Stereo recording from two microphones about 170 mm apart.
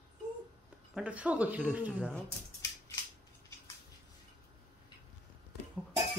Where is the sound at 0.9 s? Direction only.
10° right (ahead or behind).